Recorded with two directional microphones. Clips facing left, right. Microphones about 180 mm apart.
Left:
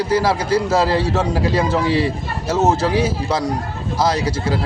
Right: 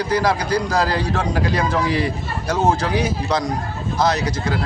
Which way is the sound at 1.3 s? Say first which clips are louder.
Left 2 dB; 30° left (ahead or behind).